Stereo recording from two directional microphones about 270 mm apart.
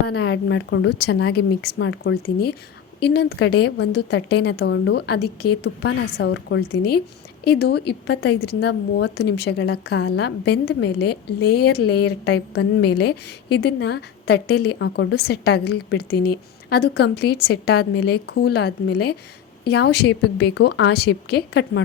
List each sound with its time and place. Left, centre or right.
0.1 s a woman's voice: left